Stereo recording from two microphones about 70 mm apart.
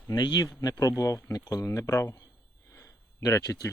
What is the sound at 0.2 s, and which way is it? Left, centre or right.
Speech, left.